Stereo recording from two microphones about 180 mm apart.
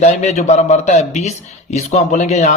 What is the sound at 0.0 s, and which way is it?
Speech, 40° left (ahead or behind).